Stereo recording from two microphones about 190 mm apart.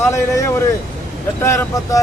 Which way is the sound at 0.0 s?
15° left (ahead or behind).